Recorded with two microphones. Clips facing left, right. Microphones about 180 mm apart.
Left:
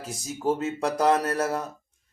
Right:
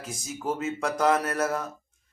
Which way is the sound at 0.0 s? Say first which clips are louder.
Left 5 dB; 35° left (ahead or behind).